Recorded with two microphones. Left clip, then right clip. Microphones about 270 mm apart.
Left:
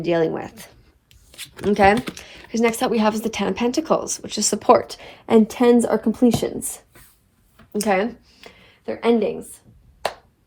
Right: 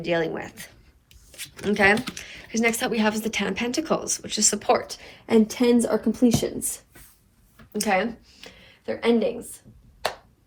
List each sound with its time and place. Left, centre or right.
0.0 s speech: left